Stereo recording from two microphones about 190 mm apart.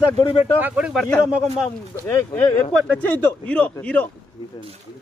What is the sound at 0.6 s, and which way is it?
Speech, 5° right (ahead or behind).